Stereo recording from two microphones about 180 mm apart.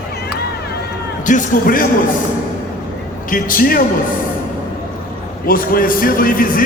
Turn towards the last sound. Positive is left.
turn(degrees=50)  # may be behind; listen again after turning